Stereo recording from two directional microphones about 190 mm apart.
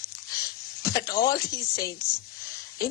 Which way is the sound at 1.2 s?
50° left (ahead or behind).